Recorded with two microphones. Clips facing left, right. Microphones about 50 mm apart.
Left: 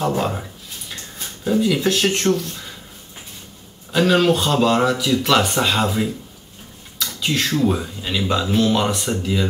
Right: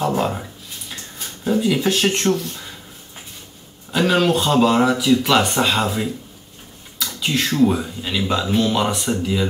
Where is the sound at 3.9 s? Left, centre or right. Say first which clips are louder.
Left 1 dB; centre.